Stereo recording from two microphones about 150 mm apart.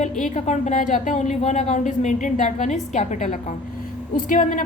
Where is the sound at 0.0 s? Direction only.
55° left (ahead or behind).